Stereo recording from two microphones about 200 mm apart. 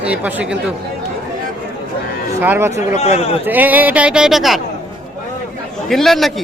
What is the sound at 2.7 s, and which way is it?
Speech, 35° left (ahead or behind).